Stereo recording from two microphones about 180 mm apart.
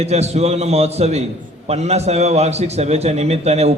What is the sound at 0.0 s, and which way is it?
A man's voice, 35° right (ahead or behind).